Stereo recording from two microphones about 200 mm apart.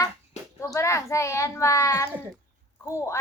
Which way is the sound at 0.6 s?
15° left (ahead or behind).